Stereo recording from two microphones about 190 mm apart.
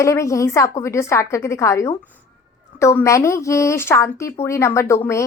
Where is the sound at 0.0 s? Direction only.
15° left (ahead or behind).